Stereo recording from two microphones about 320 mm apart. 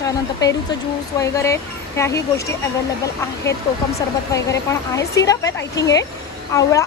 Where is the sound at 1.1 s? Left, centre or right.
Centre.